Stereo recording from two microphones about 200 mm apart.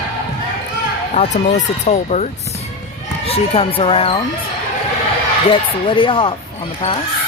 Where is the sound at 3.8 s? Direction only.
30° left (ahead or behind).